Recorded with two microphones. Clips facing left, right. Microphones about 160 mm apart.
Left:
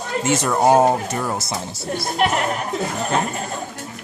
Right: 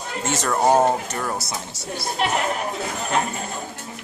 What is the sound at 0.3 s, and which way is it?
Speech, 15° left (ahead or behind).